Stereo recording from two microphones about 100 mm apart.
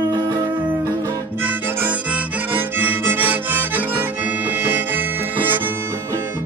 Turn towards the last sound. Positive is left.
turn(degrees=-20)  # may be behind; listen again after turning